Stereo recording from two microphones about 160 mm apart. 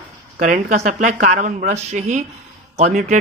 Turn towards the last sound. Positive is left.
turn(degrees=-50)  # may be behind; listen again after turning